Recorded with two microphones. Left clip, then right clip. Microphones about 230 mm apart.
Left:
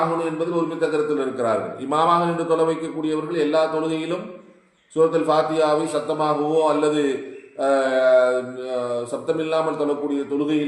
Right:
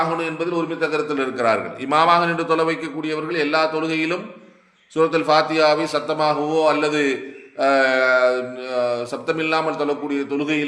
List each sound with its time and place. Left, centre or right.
0.2 s a man's voice: right